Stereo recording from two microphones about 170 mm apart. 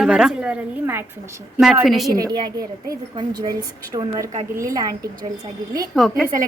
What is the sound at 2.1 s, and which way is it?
A woman's voice, 20° right (ahead or behind).